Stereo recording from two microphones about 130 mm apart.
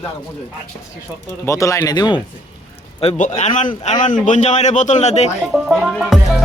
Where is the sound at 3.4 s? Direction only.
65° left (ahead or behind).